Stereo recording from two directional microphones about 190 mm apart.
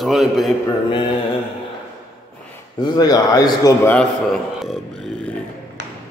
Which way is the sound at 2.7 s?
20° left (ahead or behind).